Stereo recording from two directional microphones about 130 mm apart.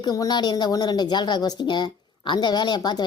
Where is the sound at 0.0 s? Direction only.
30° left (ahead or behind).